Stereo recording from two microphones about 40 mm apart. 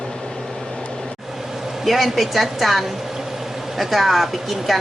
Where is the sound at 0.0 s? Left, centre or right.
Centre.